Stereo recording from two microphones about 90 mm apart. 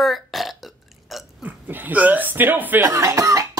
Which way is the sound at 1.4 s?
20° right (ahead or behind).